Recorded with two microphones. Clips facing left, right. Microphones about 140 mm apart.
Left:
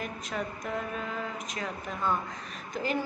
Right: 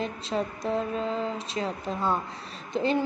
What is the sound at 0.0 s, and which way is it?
Speech, 30° right (ahead or behind).